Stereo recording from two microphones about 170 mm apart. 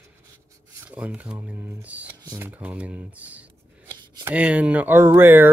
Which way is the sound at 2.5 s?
10° right (ahead or behind).